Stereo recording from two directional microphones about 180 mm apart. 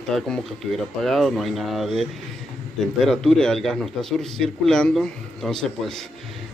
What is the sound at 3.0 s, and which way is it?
A man's voice, 5° left (ahead or behind).